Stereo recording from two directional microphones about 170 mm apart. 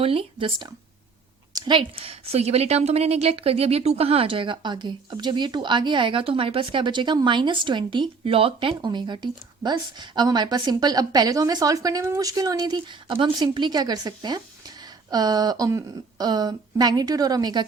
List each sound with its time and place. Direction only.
0.0 s a woman's voice: 35° right (ahead or behind)